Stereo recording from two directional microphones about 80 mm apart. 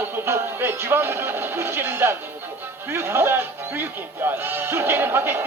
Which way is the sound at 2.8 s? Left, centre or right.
Right.